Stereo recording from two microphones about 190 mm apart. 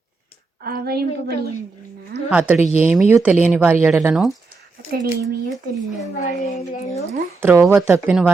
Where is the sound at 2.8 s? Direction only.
10° right (ahead or behind).